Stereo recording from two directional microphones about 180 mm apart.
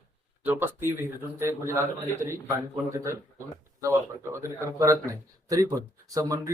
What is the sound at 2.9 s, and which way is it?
Speech, 15° right (ahead or behind).